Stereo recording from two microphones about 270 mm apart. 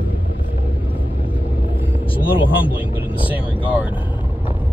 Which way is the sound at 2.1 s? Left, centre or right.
Centre.